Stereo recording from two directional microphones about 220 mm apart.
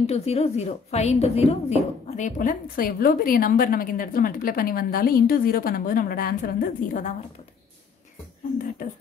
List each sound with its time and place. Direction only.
0.0 s a woman's voice: 30° left (ahead or behind)